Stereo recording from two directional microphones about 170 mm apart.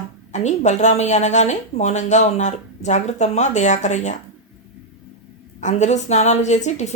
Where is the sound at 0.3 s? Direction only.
45° left (ahead or behind).